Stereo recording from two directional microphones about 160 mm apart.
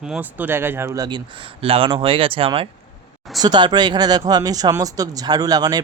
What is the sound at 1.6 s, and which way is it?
Speech, 35° right (ahead or behind).